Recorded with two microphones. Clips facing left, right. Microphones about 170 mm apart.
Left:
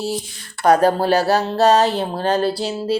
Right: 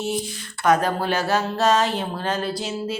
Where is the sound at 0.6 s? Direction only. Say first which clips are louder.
Left 5 dB; 35° left (ahead or behind).